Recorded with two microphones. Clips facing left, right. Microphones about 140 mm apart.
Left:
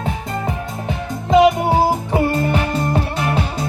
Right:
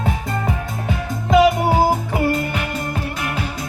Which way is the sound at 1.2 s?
25° left (ahead or behind).